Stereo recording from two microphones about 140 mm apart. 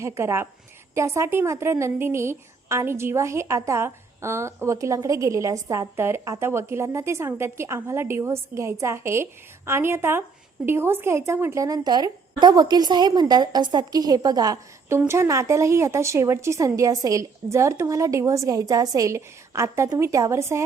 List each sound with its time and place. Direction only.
0.0 s a woman's voice: 20° right (ahead or behind)